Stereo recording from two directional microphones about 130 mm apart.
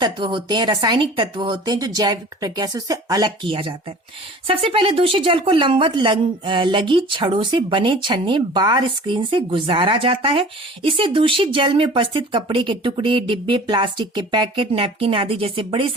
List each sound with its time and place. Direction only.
0.0 s a woman's voice: 35° right (ahead or behind)